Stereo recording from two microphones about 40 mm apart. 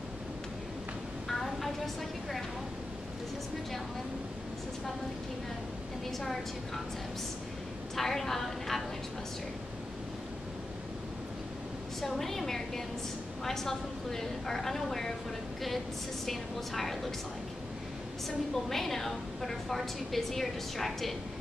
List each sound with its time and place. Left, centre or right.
1.3 s a sound: centre
6.0 s a woman's voice: centre
7.9 s a woman's voice: centre
12.0 s a woman's voice: centre
16.3 s a woman's voice: centre
18.5 s a woman's voice: centre